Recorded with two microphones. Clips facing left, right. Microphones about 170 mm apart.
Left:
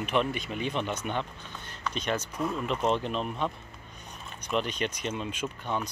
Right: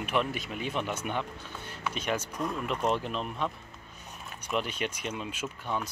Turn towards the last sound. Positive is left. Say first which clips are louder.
# left 2 dB
turn(degrees=-5)  # may be behind; listen again after turning